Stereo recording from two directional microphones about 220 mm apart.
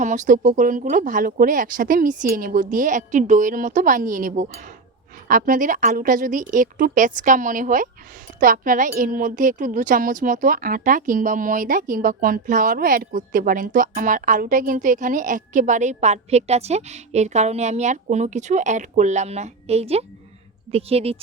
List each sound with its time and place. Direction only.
0.0 s speech: 35° right (ahead or behind)